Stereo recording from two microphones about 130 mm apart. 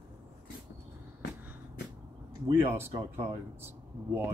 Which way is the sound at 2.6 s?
20° right (ahead or behind).